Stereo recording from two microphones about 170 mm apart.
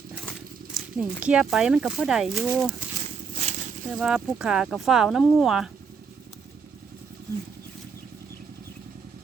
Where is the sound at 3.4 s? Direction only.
45° right (ahead or behind).